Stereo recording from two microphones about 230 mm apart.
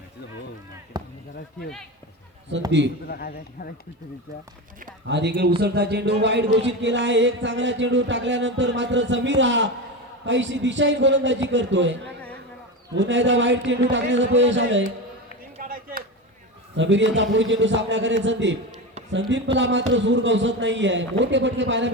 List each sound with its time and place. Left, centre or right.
0.9 s basketball bounce: centre
2.5 s speech: right
3.1 s a man's voice: left
5.0 s speech: right
15.5 s chop: right
16.7 s speech: right
19.5 s speech: right